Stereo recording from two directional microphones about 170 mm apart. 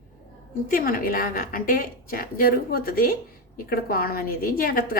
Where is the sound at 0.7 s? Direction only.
55° left (ahead or behind).